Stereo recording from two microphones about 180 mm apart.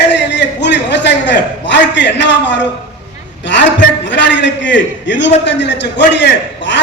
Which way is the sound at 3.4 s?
80° left.